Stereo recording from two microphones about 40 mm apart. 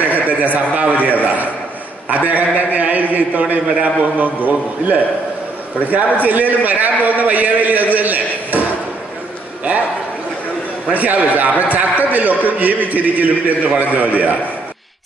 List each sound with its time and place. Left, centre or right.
0.0 s a man's voice: right
10.9 s a man's voice: right